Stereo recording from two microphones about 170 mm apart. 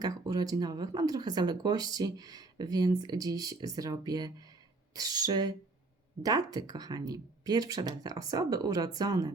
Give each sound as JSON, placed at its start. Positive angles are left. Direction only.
{"t": 0.0, "sound": "speech", "side_deg": -20}